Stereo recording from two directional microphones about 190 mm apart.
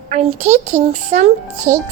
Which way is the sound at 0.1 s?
35° right (ahead or behind).